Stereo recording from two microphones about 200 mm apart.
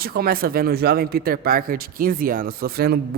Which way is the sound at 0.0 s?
50° right (ahead or behind).